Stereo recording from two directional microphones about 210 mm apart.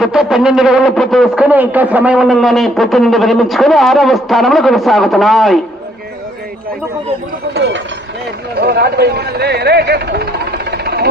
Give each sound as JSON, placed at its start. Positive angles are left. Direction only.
{"t": 0.0, "sound": "speech", "side_deg": 0}
{"t": 7.5, "sound": "speech", "side_deg": -55}